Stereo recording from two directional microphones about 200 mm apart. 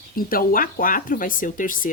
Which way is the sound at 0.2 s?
45° left (ahead or behind).